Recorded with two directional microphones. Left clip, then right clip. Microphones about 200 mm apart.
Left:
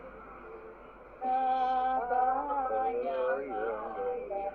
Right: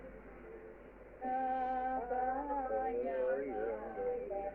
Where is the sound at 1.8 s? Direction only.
25° left (ahead or behind).